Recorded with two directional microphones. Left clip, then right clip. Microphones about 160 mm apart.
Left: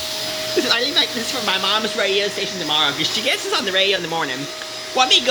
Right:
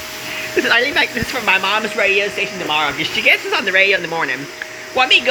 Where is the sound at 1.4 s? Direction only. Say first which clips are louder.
Right 4 dB; 15° left (ahead or behind).